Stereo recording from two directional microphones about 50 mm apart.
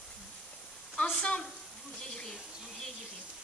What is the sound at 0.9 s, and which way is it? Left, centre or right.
Speech, left.